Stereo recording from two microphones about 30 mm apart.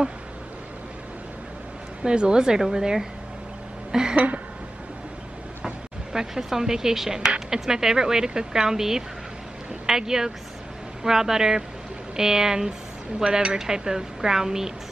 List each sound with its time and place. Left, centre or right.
2.0 s a woman's voice: right
6.1 s a woman's voice: centre